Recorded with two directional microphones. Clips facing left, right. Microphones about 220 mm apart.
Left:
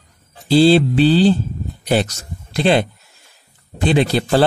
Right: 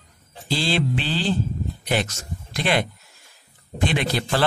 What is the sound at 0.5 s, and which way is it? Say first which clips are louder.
Speech: left 14 dB; 35° left (ahead or behind).